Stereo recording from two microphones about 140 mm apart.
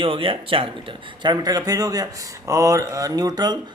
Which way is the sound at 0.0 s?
40° right (ahead or behind).